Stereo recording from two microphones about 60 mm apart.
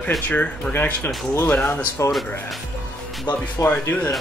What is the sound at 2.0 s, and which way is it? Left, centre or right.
Speech, left.